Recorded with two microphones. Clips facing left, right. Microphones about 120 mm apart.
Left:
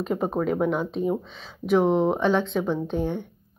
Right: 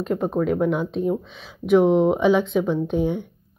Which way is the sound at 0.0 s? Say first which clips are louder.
Right 2 dB; 5° left (ahead or behind).